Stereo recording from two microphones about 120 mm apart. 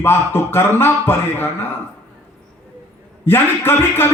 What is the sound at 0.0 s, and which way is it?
A man's voice, 20° left (ahead or behind).